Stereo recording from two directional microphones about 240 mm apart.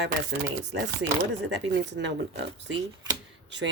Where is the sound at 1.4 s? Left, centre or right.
Right.